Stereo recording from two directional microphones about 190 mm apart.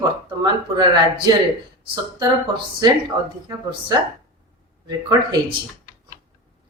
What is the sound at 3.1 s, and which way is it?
Speech, 15° right (ahead or behind).